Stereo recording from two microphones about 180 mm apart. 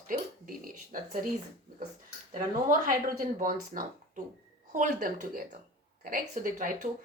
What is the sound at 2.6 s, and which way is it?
Speech, 45° right (ahead or behind).